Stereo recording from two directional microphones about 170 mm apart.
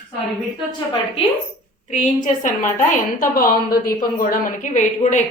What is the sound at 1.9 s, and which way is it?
A woman's voice, 45° left (ahead or behind).